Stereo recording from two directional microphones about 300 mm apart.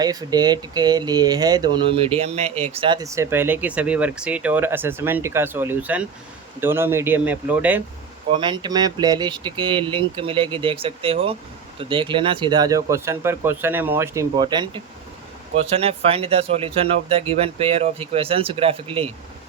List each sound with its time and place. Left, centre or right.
0.0 s speech: centre
8.3 s speech: centre